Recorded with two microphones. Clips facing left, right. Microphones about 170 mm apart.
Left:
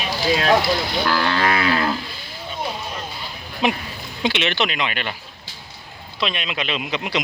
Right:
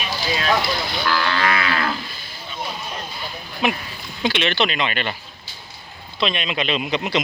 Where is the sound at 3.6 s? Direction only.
25° left (ahead or behind); by 5.1 s 5° left (ahead or behind).